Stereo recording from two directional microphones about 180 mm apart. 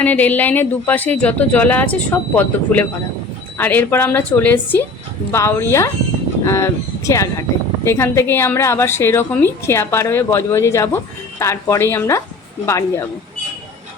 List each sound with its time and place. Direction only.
0.0 s a woman's voice: 10° left (ahead or behind)